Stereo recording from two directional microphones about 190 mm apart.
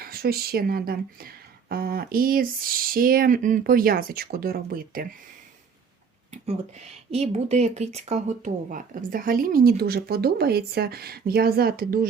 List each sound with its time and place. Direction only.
0.0 s speech: 50° right (ahead or behind)
6.3 s speech: 35° right (ahead or behind); by 12.0 s 50° right (ahead or behind)